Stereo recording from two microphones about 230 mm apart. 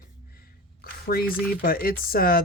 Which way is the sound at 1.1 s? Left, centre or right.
Left.